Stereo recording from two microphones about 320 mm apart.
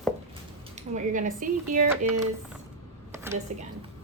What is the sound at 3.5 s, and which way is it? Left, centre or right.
Speech, right.